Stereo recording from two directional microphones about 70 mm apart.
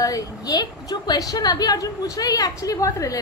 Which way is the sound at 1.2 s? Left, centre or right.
Left.